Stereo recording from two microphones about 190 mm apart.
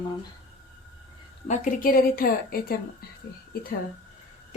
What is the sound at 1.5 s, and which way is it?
A woman's voice, 45° left (ahead or behind).